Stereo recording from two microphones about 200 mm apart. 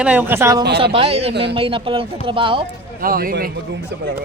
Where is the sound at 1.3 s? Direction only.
55° right (ahead or behind).